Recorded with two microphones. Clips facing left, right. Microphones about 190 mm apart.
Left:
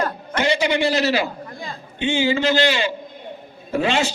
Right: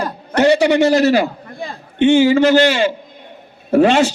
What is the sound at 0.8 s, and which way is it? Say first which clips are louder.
A man's voice: right 7 dB; 45° right (ahead or behind).